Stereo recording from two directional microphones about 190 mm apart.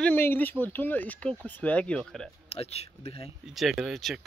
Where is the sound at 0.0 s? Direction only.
10° left (ahead or behind).